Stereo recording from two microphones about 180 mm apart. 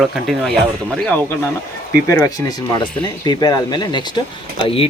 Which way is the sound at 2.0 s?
15° left (ahead or behind).